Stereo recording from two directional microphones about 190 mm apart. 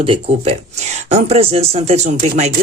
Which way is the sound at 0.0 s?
30° right (ahead or behind).